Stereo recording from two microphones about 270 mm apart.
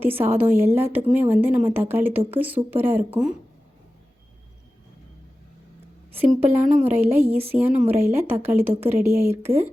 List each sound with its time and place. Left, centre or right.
0.0 s speech: centre
6.1 s speech: centre